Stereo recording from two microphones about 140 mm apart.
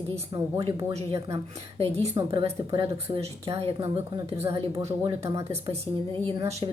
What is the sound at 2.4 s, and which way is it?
Speech, 40° right (ahead or behind).